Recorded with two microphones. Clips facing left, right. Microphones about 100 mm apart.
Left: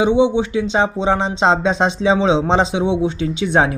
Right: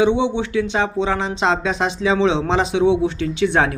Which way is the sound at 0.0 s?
20° left (ahead or behind).